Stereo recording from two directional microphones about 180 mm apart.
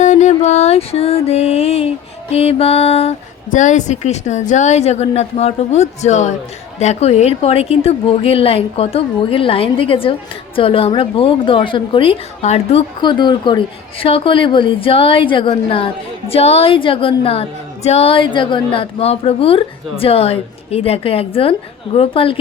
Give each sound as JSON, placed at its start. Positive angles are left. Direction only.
{"t": 0.0, "sound": "music", "side_deg": 40}
{"t": 2.3, "sound": "a woman's voice", "side_deg": 35}